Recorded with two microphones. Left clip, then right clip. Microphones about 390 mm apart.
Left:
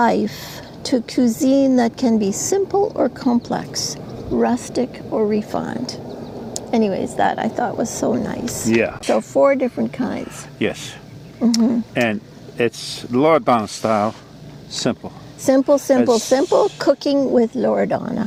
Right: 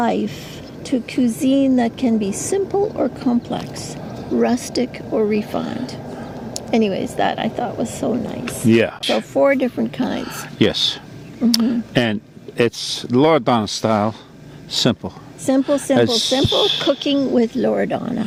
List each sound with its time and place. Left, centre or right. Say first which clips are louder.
0.0 s a woman's voice: left 3 dB; left; by 5.5 s centre
5.5 s speech: even; left
8.7 s speech: right 2 dB; right
9.0 s speech: left 3 dB; left
10.6 s speech: right 5 dB; right
12.5 s speech: right 2 dB; right
15.4 s speech: left 3 dB; left